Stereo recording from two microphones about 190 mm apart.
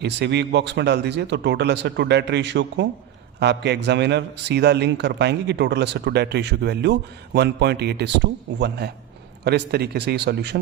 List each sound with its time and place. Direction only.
0.0 s a man's voice: 65° right (ahead or behind)